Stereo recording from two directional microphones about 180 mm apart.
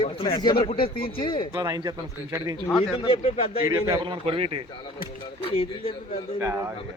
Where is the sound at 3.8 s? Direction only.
25° right (ahead or behind).